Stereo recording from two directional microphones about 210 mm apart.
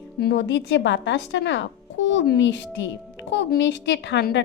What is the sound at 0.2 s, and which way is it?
A woman's voice, 55° left (ahead or behind).